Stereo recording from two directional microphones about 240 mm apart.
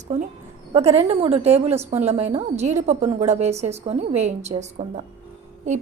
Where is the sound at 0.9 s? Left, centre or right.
Right.